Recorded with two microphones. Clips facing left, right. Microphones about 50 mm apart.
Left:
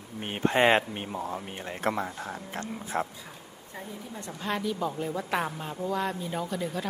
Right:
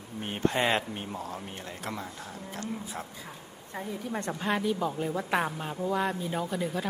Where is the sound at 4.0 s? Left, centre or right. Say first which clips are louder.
Right 7 dB; right.